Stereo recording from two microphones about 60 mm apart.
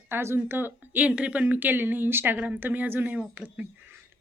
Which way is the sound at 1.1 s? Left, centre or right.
Right.